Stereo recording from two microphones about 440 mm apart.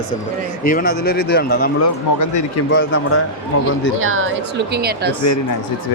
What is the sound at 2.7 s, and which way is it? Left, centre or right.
Speech, left.